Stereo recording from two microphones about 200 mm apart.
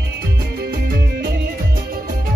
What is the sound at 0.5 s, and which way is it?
Music, 50° right (ahead or behind).